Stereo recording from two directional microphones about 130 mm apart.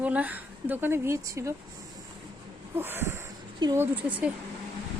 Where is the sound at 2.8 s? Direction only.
15° right (ahead or behind).